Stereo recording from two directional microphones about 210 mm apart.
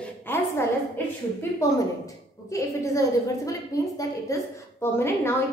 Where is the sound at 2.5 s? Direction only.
15° left (ahead or behind).